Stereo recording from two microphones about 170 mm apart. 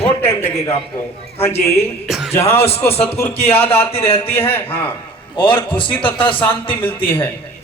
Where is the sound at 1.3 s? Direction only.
35° left (ahead or behind).